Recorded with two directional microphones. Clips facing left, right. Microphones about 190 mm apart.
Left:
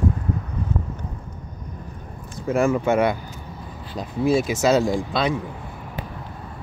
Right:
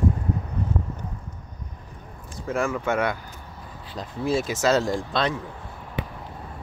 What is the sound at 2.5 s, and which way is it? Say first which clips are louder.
Speech: left 6 dB; 15° left (ahead or behind).